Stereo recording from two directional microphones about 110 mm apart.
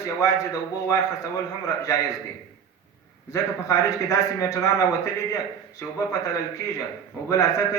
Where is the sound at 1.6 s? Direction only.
30° left (ahead or behind).